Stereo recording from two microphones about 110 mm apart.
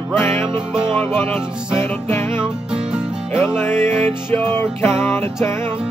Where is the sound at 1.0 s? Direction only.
20° left (ahead or behind).